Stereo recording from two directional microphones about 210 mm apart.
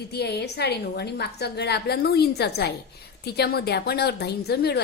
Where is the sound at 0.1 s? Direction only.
50° left (ahead or behind).